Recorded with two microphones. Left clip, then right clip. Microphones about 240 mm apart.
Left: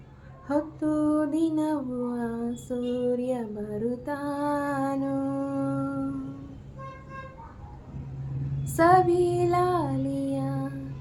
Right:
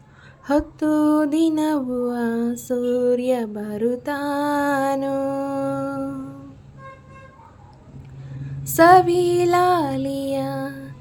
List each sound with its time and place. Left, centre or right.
0.4 s music: right
8.6 s child singing: right